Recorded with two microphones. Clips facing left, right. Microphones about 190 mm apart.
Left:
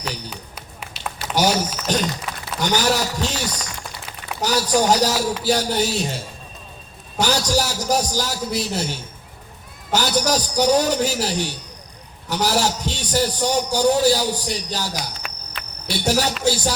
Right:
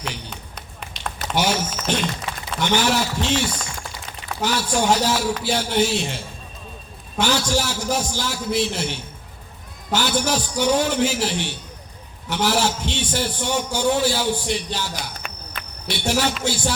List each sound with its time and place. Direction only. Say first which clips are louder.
0.3 s run: left 1 dB; 5° left (ahead or behind)
1.4 s a man's voice: left 3 dB; 40° left (ahead or behind)
15.6 s cricket: left 1 dB; centre (ahead or behind)
15.9 s a man's voice: left 1 dB; 40° left (ahead or behind)